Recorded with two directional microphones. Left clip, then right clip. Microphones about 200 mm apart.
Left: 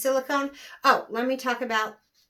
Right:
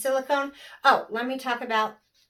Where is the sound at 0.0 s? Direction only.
40° left (ahead or behind).